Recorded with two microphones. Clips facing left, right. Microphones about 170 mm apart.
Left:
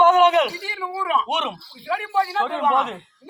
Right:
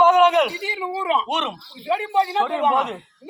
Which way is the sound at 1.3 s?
5° left (ahead or behind).